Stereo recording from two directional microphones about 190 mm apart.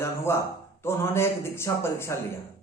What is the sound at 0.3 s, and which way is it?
Speech, 15° left (ahead or behind).